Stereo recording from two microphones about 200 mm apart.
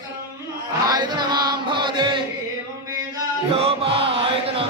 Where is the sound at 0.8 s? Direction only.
20° right (ahead or behind).